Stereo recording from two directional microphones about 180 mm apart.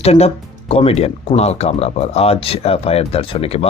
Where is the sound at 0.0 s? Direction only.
35° left (ahead or behind).